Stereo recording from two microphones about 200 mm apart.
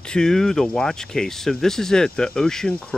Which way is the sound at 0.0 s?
5° left (ahead or behind).